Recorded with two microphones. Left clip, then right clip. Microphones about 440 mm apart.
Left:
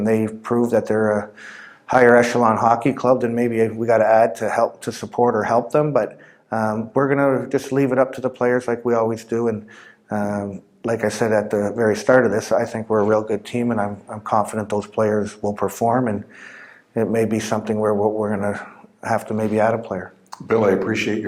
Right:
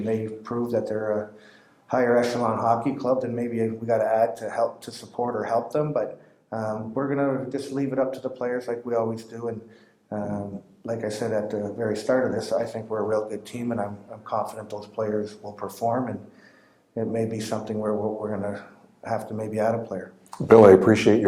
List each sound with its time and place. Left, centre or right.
0.0 s speech: left
20.5 s speech: right